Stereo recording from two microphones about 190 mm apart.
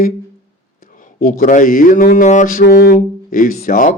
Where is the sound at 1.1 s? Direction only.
45° left (ahead or behind).